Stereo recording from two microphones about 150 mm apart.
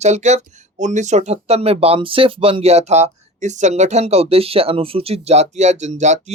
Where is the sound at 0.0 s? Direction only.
50° right (ahead or behind).